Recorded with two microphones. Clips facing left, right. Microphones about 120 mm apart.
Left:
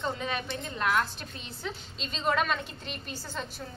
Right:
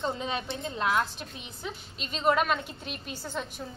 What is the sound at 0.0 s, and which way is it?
A woman's voice, 25° right (ahead or behind).